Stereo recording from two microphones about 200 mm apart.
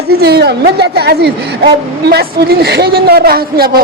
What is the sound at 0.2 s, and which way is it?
A woman's voice, 55° right (ahead or behind).